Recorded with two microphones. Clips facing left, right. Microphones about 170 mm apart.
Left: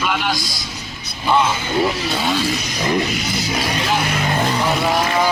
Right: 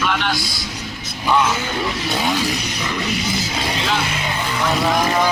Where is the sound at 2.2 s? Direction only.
15° right (ahead or behind).